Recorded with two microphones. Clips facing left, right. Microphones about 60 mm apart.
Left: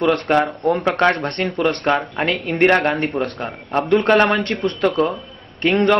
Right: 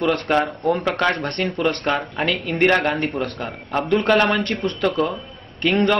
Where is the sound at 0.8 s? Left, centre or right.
Left.